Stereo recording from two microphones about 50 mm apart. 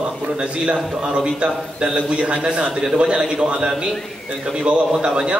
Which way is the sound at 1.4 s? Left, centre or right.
Right.